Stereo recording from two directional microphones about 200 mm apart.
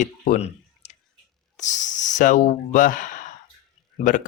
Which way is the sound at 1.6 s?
40° left (ahead or behind).